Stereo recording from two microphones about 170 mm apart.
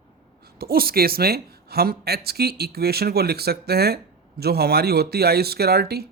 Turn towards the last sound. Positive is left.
turn(degrees=-65)  # may be behind; listen again after turning